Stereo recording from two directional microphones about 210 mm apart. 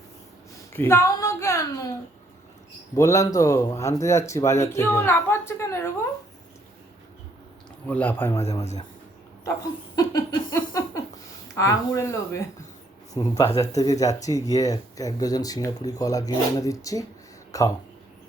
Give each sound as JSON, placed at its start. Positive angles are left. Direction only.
{"t": 0.7, "sound": "a sound", "side_deg": 10}
{"t": 2.9, "sound": "speech", "side_deg": 15}
{"t": 7.9, "sound": "speech", "side_deg": 10}
{"t": 9.9, "sound": "laughter", "side_deg": 15}
{"t": 10.5, "sound": "a sound", "side_deg": 15}
{"t": 11.5, "sound": "speech", "side_deg": 15}